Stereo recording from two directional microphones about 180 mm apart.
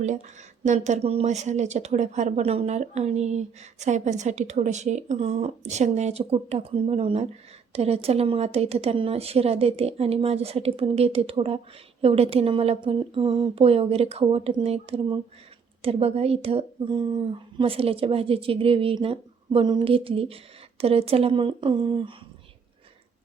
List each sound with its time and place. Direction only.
0.6 s speech: 40° right (ahead or behind)